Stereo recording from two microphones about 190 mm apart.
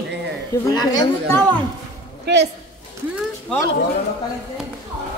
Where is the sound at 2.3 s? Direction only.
60° right (ahead or behind).